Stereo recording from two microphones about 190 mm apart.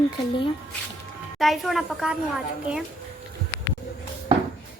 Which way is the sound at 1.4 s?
Centre (ahead or behind).